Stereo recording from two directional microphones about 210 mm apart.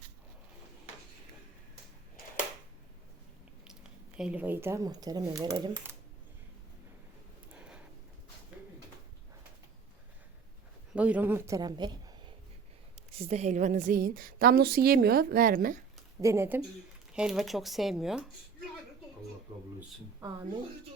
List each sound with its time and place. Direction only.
4.2 s speech: 5° right (ahead or behind)
7.5 s a sound: 5° right (ahead or behind)
8.5 s bird: 5° right (ahead or behind)
10.9 s a woman's voice: 5° right (ahead or behind)
13.1 s a woman's voice: 30° right (ahead or behind)
16.2 s speech: 10° right (ahead or behind)
17.2 s speech: centre (ahead or behind)